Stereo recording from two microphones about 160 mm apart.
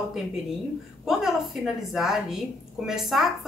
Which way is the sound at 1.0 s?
Centre (ahead or behind).